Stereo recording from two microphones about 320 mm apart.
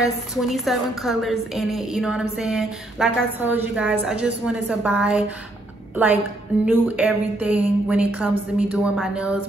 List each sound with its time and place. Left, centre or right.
0.4 s a woman's voice: centre
6.6 s a woman's voice: centre